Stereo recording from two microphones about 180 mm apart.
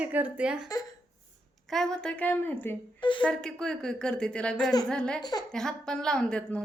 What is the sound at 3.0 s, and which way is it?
Speech, 25° left (ahead or behind).